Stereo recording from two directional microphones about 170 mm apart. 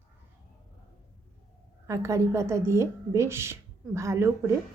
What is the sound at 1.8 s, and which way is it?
Speech, 15° right (ahead or behind).